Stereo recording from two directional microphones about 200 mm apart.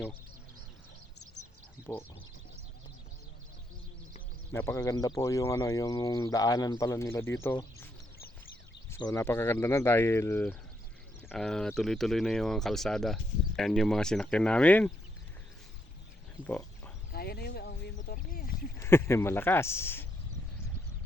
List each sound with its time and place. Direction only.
1.9 s speech: 5° left (ahead or behind)
4.5 s speech: 15° left (ahead or behind)
8.9 s speech: 15° left (ahead or behind)
16.5 s pig: 5° left (ahead or behind)
17.1 s a sound: 50° left (ahead or behind)
18.8 s speech: 10° left (ahead or behind)